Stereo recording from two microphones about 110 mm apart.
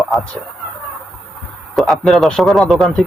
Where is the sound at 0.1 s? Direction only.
Centre (ahead or behind).